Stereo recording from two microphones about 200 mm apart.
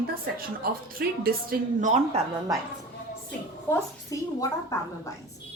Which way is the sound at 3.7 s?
15° left (ahead or behind).